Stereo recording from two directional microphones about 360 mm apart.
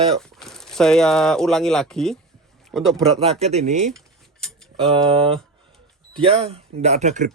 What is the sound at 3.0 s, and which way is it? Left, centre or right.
Speech, centre.